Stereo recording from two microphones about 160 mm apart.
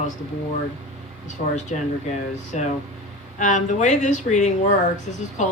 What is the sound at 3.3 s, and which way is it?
Speech, 50° left (ahead or behind).